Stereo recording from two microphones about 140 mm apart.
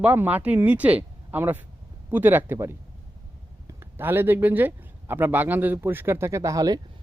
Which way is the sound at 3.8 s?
15° right (ahead or behind).